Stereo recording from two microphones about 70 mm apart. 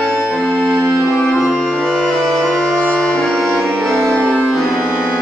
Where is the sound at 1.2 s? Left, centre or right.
Centre.